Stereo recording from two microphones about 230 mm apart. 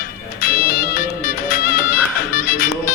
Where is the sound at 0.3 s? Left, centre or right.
Left.